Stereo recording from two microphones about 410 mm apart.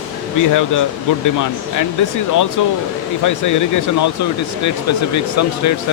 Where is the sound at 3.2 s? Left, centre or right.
Left.